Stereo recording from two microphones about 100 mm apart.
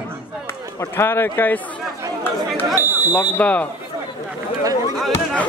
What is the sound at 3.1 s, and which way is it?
Speech, 15° left (ahead or behind).